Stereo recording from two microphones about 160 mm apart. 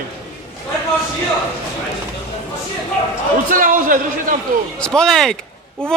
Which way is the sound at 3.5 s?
55° right (ahead or behind).